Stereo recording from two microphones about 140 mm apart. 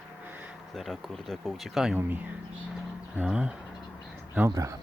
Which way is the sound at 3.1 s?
10° right (ahead or behind).